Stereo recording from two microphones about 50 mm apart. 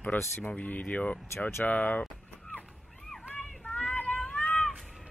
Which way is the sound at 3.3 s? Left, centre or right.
Centre.